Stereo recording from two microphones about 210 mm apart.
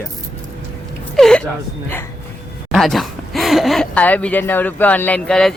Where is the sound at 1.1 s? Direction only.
5° left (ahead or behind).